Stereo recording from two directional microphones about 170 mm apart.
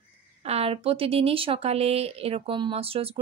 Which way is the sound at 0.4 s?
35° right (ahead or behind).